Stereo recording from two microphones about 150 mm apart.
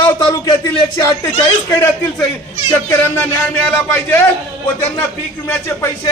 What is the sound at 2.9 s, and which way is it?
Speech, 15° left (ahead or behind).